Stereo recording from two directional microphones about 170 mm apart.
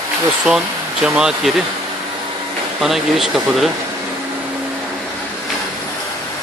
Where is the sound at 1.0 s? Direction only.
5° right (ahead or behind).